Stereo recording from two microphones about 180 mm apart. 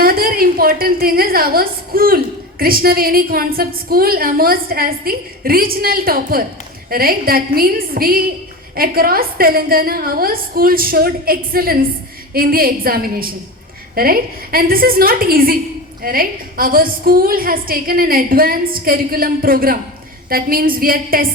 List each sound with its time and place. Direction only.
0.0 s a woman's voice: 55° right (ahead or behind)